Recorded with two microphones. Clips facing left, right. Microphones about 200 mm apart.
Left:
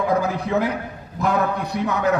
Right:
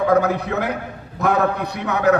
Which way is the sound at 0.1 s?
65° right (ahead or behind).